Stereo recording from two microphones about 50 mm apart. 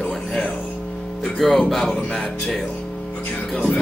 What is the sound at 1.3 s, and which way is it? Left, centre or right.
Speech, centre.